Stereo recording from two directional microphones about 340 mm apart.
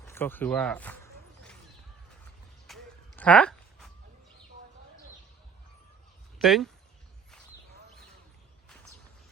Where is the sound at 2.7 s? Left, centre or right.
Centre.